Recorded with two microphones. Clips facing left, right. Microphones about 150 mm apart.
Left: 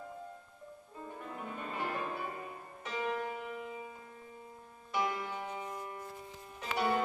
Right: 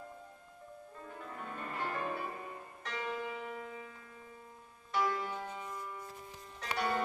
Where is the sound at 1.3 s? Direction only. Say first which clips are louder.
Left 1 dB; 10° left (ahead or behind).